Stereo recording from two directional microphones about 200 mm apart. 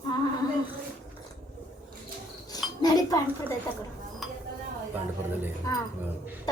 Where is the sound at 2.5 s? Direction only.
20° left (ahead or behind).